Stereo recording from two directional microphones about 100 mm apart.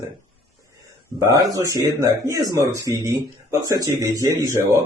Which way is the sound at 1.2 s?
35° right (ahead or behind).